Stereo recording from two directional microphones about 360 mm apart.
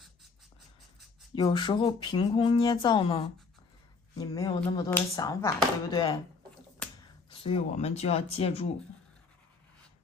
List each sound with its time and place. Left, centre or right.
1.4 s speech: centre
7.3 s speech: centre